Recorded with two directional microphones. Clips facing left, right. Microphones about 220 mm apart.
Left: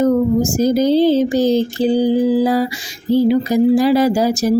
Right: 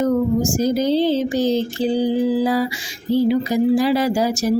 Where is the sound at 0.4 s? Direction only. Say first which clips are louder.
Left 4 dB; 40° left (ahead or behind).